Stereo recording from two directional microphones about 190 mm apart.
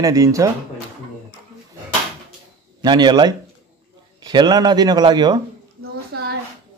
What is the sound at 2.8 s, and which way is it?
A man's voice, 25° right (ahead or behind).